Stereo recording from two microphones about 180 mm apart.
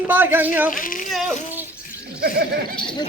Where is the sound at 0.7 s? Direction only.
50° left (ahead or behind).